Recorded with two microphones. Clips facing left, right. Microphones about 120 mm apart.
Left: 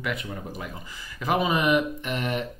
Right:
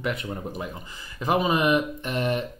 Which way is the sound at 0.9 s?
20° right (ahead or behind).